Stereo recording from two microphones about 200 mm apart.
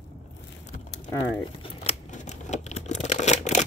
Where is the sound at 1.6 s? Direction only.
30° left (ahead or behind).